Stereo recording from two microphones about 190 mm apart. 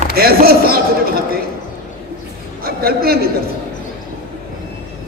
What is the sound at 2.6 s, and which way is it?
Speech, 55° right (ahead or behind).